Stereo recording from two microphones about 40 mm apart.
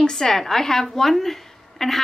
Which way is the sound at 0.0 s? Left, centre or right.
Centre.